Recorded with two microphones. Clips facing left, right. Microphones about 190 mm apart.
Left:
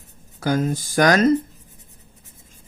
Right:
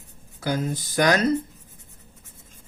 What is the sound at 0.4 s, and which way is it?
Speech, 45° left (ahead or behind).